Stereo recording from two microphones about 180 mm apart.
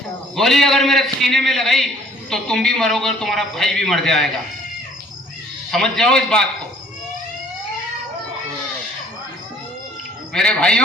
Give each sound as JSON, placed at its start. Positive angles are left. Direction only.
{"t": 0.3, "sound": "a man's voice", "side_deg": 0}
{"t": 5.7, "sound": "a man's voice", "side_deg": 0}
{"t": 10.3, "sound": "a man's voice", "side_deg": 5}